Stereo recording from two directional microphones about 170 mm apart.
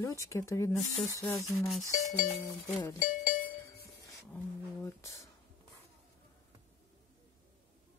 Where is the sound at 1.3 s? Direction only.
Centre (ahead or behind).